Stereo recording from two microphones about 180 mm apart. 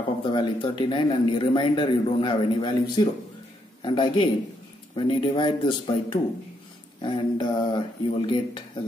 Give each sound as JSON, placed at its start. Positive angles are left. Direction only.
{"t": 0.2, "sound": "a man's voice", "side_deg": 25}